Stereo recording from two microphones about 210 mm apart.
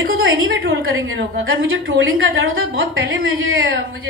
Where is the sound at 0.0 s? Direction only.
70° right (ahead or behind).